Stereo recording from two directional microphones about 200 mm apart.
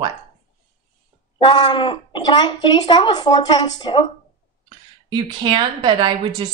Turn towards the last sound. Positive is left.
turn(degrees=-25)  # may be behind; listen again after turning